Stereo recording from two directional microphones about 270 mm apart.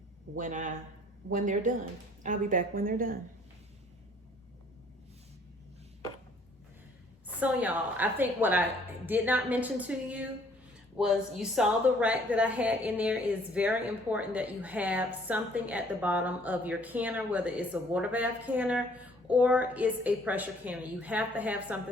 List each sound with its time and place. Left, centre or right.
0.3 s a woman's voice: right
7.3 s a woman's voice: centre